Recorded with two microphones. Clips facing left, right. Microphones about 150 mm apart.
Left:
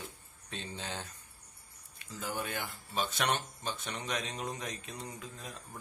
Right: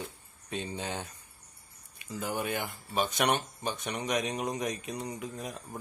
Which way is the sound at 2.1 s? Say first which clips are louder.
Right 5 dB; 15° right (ahead or behind).